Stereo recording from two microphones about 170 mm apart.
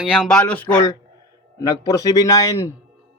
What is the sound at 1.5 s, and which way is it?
Speech, 20° left (ahead or behind).